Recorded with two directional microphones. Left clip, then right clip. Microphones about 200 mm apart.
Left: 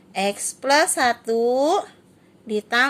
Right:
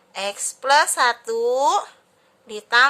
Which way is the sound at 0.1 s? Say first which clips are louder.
Left 3 dB; centre (ahead or behind).